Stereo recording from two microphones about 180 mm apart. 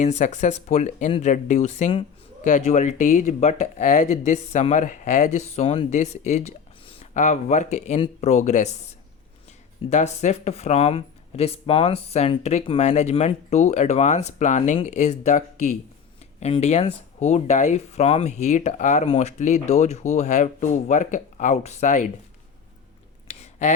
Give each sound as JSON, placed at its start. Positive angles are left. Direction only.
{"t": 0.0, "sound": "speech", "side_deg": 40}
{"t": 9.9, "sound": "speech", "side_deg": 40}
{"t": 23.4, "sound": "a sound", "side_deg": 40}